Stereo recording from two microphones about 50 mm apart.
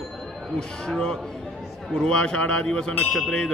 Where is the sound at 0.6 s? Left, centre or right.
Centre.